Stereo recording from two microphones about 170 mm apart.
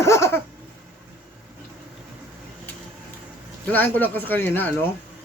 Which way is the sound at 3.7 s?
10° left (ahead or behind).